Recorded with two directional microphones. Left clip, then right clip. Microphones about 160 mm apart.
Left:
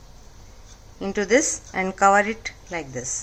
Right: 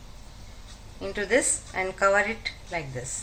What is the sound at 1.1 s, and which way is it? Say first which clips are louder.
A woman's voice: left 4 dB; 65° left (ahead or behind).